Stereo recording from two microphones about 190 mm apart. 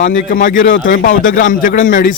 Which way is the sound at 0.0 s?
45° left (ahead or behind).